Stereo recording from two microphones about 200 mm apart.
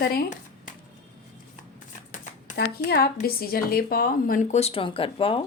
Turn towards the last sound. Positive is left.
turn(degrees=25)  # may be behind; listen again after turning